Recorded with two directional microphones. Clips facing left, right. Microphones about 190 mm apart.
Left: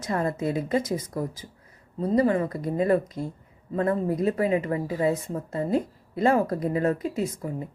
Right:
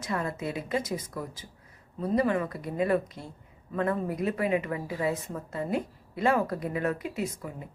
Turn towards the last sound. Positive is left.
turn(degrees=35)  # may be behind; listen again after turning